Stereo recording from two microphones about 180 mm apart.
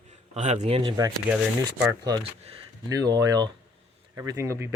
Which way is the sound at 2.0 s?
20° right (ahead or behind).